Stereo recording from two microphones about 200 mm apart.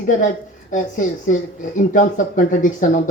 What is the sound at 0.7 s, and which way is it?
Speech, 40° left (ahead or behind).